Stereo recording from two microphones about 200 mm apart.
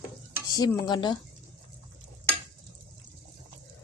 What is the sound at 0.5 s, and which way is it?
Speech, 20° left (ahead or behind).